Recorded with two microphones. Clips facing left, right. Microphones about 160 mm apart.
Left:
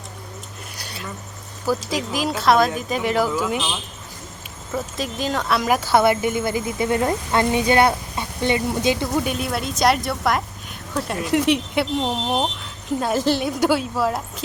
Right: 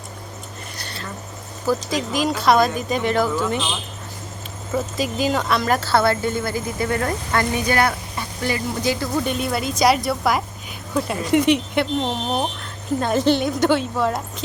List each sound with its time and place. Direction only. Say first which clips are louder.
0.8 s a sound: even; 10° left (ahead or behind)
1.6 s speech: right 1 dB; 5° left (ahead or behind)
4.7 s speech: right 3 dB; 5° right (ahead or behind); by 9.0 s 20° left (ahead or behind)
9.1 s speech: right 1 dB; 5° left (ahead or behind)